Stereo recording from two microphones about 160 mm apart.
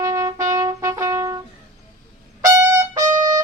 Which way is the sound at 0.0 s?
20° right (ahead or behind).